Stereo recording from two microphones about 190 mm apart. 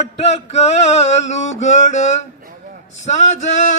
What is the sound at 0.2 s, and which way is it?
A man's voice, 35° left (ahead or behind).